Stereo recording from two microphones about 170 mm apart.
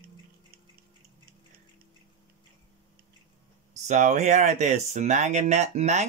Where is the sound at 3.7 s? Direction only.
45° right (ahead or behind).